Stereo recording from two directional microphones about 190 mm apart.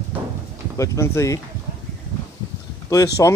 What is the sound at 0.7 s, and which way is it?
Speech, 15° left (ahead or behind).